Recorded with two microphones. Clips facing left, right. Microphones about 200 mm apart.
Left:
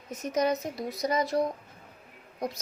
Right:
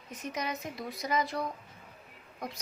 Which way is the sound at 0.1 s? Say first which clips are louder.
Left 9 dB; 45° left (ahead or behind).